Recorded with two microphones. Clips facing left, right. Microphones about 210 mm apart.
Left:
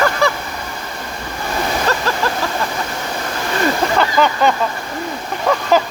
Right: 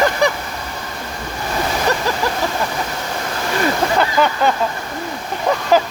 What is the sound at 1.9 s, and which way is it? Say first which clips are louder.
Splash: right 1 dB; 15° right (ahead or behind).